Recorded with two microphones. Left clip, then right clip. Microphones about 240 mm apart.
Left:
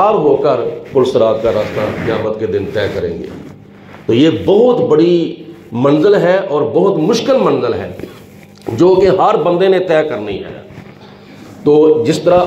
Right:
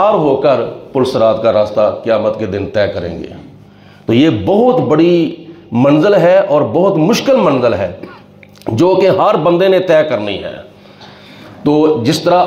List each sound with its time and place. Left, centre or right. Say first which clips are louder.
0.0 s speech: even; right
4.1 s a man's voice: left 1 dB; right
11.6 s speech: left 3 dB; right